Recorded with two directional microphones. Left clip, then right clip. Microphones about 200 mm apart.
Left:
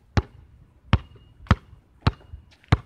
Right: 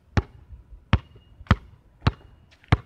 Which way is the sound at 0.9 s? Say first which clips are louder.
Even; 15° left (ahead or behind).